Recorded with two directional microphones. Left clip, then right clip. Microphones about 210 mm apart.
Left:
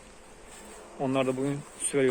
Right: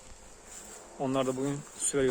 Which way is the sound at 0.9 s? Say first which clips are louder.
Left 2 dB; 25° right (ahead or behind).